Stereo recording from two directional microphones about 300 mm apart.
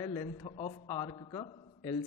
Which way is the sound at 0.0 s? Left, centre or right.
Centre.